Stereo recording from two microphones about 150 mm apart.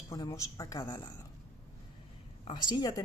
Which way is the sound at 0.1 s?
20° left (ahead or behind).